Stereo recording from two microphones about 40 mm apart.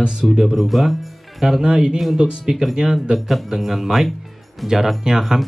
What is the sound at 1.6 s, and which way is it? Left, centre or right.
A man's voice, centre.